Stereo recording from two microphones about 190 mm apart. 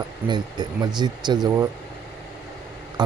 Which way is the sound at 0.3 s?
20° right (ahead or behind).